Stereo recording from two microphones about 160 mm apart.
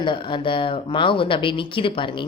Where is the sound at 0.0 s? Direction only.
30° left (ahead or behind).